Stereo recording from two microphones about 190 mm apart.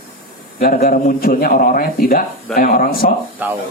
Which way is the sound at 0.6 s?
50° left (ahead or behind).